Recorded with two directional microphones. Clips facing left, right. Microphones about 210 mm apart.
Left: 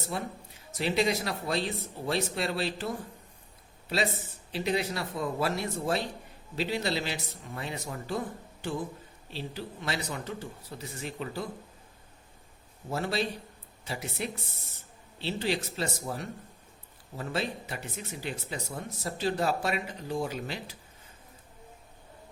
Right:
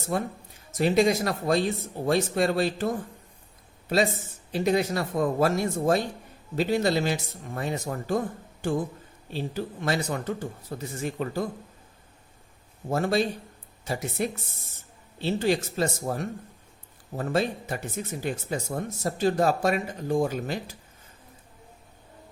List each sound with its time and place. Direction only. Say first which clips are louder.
0.1 s speech: right 8 dB; 45° right (ahead or behind)
9.3 s speech: right 7 dB; 50° right (ahead or behind)
12.9 s speech: right 6 dB; 50° right (ahead or behind)